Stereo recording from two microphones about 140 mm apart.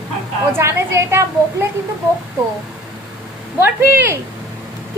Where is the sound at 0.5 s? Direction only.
15° right (ahead or behind).